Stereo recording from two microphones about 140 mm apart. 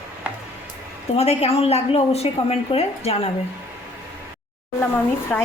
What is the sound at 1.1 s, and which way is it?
A woman's voice, 50° left (ahead or behind).